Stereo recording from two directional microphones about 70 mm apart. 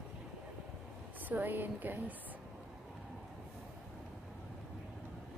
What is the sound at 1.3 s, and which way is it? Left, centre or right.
Speech, right.